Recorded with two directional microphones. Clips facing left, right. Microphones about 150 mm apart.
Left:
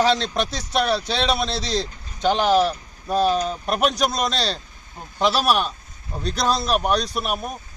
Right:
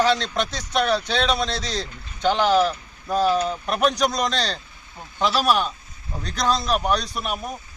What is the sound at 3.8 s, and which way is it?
Speech, 5° left (ahead or behind).